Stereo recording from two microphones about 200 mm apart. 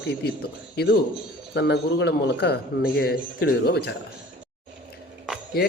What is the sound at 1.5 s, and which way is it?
A man's voice, 60° left (ahead or behind).